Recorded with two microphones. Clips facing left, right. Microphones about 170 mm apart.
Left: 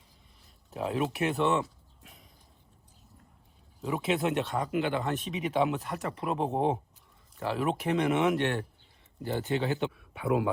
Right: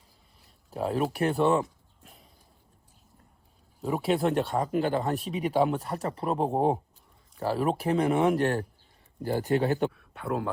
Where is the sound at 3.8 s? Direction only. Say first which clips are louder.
Right 3 dB; 35° right (ahead or behind).